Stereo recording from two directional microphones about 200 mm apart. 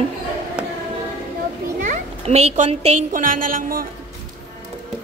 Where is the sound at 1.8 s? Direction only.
30° right (ahead or behind).